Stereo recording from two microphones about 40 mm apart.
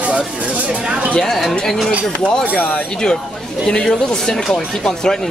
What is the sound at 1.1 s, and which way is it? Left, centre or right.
Speech, centre.